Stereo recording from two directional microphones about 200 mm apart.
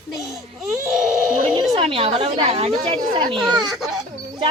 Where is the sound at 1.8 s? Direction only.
25° right (ahead or behind).